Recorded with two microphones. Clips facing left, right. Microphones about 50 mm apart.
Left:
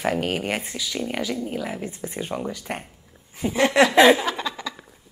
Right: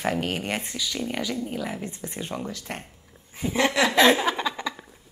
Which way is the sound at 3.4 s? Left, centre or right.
Left.